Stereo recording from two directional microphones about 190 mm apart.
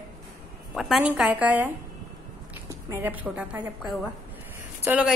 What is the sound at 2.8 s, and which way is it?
A woman's voice, 10° right (ahead or behind).